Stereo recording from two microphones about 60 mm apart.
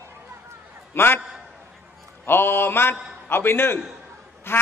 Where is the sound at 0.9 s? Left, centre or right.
Left.